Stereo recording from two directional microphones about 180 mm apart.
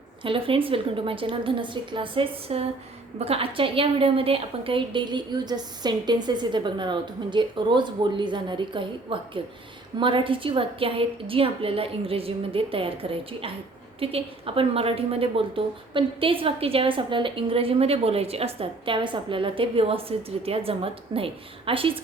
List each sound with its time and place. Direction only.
0.2 s a woman's voice: 30° right (ahead or behind)